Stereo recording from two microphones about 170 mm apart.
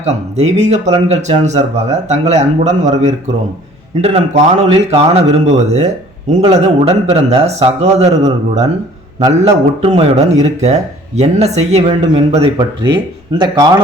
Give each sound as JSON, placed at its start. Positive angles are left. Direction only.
{"t": 0.0, "sound": "speech", "side_deg": -40}